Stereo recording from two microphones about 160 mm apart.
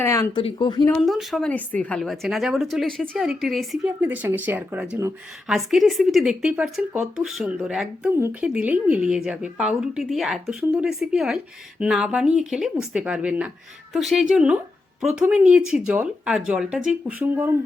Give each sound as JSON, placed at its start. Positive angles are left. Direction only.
{"t": 0.0, "sound": "speech", "side_deg": 20}
{"t": 0.3, "sound": "speech", "side_deg": 30}
{"t": 0.9, "sound": "speech", "side_deg": 0}